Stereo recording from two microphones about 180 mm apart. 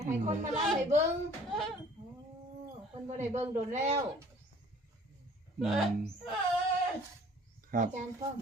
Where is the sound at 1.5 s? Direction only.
Centre (ahead or behind).